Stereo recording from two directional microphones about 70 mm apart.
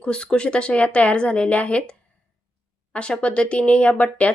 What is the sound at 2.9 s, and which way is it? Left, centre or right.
A woman's voice, centre.